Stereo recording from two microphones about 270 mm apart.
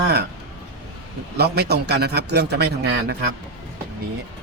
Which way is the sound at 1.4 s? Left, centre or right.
Right.